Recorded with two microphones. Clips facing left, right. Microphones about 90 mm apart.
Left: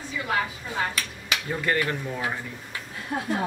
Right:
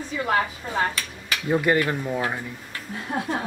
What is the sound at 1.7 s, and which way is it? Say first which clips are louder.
Speech: right 4 dB; 15° right (ahead or behind).